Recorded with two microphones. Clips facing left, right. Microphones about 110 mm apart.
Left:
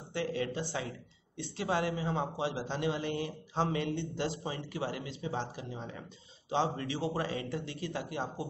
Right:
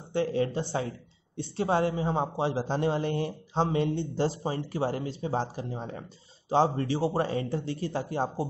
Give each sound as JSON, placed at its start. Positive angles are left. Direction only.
{"t": 0.1, "sound": "speech", "side_deg": -35}